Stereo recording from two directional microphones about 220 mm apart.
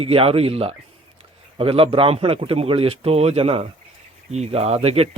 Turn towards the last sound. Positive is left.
turn(degrees=-25)  # may be behind; listen again after turning